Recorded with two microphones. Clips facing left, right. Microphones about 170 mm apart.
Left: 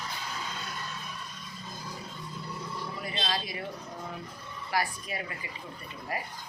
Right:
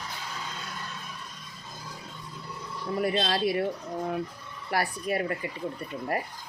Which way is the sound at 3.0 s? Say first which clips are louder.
Right 9 dB; 60° right (ahead or behind).